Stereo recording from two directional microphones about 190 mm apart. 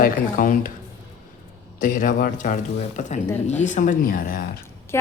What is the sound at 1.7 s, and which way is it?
A man's voice, 45° left (ahead or behind).